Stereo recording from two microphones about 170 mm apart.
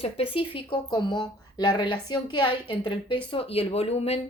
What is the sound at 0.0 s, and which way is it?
Speech, 35° left (ahead or behind).